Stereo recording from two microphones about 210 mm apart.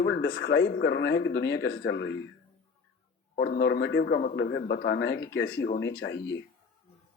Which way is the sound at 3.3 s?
45° left (ahead or behind).